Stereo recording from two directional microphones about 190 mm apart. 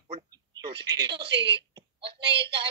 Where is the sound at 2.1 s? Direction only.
65° right (ahead or behind).